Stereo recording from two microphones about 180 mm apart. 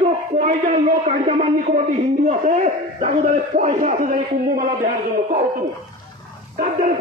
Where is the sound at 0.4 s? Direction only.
40° right (ahead or behind).